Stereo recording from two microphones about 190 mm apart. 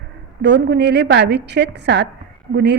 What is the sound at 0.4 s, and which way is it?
A woman's voice, 65° right (ahead or behind).